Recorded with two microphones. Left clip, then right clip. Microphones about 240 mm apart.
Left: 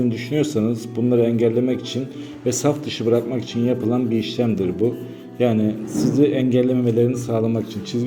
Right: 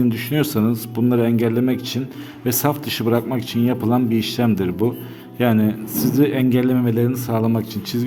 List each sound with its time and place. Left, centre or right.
0.1 s a man's voice: right